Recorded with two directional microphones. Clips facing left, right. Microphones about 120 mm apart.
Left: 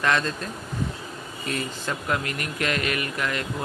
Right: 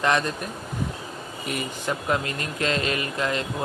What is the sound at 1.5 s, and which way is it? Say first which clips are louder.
Speech: right 1 dB; 20° right (ahead or behind).